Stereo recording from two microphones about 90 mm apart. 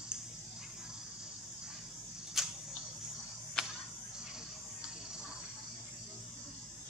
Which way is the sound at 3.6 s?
5° left (ahead or behind).